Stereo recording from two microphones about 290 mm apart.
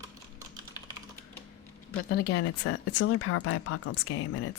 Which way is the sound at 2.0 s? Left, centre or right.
Left.